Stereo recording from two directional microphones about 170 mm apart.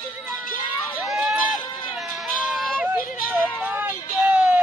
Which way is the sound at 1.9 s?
Centre (ahead or behind).